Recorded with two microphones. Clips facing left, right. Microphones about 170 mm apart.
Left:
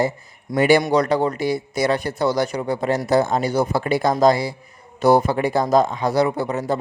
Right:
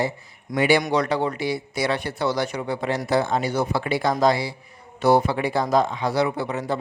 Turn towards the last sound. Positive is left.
turn(degrees=40)  # may be behind; listen again after turning